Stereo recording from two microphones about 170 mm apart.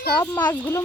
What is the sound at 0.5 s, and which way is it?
Speech, 15° left (ahead or behind).